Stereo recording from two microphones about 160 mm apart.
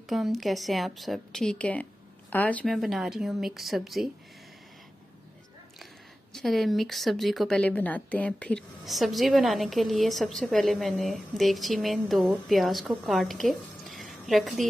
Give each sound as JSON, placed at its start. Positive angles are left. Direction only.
{"t": 0.1, "sound": "speech", "side_deg": 0}
{"t": 6.3, "sound": "speech", "side_deg": 0}